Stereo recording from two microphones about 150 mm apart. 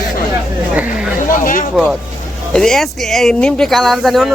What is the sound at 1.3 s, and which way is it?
Speech, 65° left (ahead or behind).